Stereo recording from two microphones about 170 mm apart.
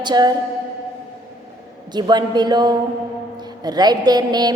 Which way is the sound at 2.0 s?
25° right (ahead or behind).